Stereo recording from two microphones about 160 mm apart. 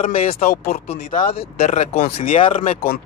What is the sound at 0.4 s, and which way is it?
Speech, 65° left (ahead or behind).